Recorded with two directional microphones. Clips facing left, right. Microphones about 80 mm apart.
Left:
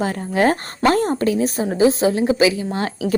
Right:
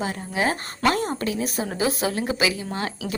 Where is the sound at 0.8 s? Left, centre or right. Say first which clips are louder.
Left 6 dB; left.